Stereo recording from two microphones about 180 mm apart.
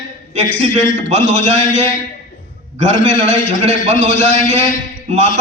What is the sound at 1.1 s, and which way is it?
A man's voice, 40° right (ahead or behind).